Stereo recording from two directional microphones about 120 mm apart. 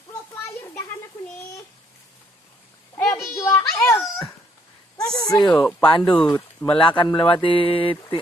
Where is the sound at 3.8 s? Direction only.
25° left (ahead or behind).